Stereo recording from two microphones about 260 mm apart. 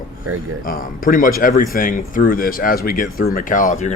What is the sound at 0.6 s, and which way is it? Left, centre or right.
Speech, left.